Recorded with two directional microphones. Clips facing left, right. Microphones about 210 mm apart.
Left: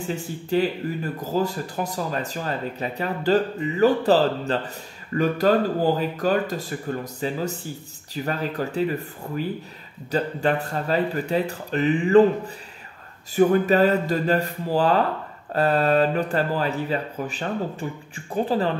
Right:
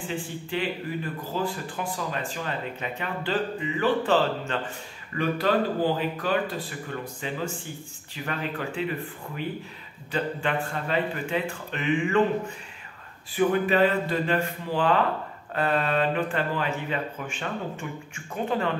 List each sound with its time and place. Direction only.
0.0 s speech: 40° left (ahead or behind)